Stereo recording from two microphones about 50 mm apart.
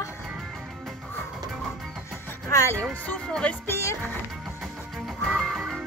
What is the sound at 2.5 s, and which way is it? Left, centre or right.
Speech, left.